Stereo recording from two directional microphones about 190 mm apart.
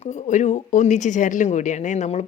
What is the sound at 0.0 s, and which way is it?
Speech, 40° left (ahead or behind).